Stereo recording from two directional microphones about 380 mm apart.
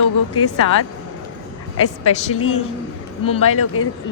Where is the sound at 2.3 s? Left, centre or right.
Left.